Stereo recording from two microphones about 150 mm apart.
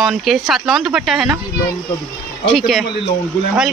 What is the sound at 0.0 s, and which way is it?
Speech, centre (ahead or behind).